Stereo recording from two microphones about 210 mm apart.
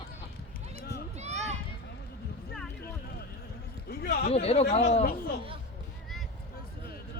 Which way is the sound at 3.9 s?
50° left (ahead or behind).